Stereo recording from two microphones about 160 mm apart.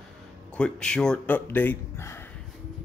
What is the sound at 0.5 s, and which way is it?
Speech, 5° left (ahead or behind).